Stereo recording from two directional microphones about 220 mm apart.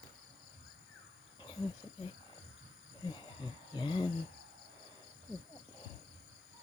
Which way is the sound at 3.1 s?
20° left (ahead or behind).